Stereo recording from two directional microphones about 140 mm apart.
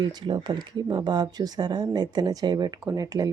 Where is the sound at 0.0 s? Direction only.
30° right (ahead or behind).